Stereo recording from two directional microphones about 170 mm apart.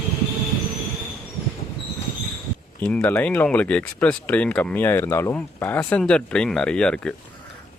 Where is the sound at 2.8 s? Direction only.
5° left (ahead or behind).